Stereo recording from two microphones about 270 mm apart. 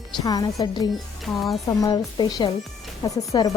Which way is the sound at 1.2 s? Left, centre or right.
Centre.